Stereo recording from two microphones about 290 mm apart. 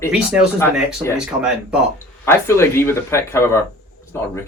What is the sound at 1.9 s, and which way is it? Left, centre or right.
Speech, centre.